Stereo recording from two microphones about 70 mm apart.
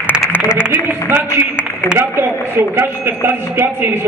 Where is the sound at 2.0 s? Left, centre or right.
Right.